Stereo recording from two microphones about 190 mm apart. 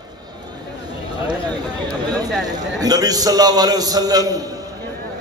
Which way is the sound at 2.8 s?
20° right (ahead or behind).